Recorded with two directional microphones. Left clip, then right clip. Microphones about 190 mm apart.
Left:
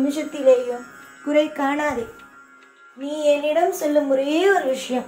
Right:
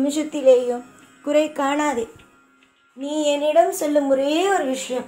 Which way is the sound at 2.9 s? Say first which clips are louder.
Left 2 dB; 25° right (ahead or behind).